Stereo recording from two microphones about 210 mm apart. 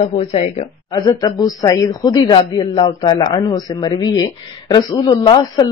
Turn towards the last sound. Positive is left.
turn(degrees=20)  # may be behind; listen again after turning